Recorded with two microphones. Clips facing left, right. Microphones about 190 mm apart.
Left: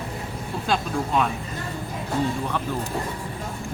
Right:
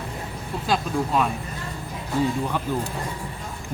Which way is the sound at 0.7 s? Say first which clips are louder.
Right 1 dB; 5° right (ahead or behind).